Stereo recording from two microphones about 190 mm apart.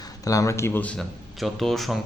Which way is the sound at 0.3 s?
15° left (ahead or behind).